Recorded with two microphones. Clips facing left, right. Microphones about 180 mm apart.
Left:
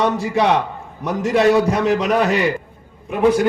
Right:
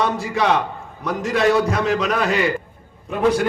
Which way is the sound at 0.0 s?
20° left (ahead or behind).